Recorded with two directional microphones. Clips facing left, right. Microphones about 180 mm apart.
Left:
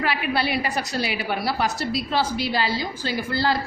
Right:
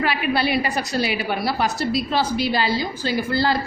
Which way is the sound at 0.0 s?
20° right (ahead or behind).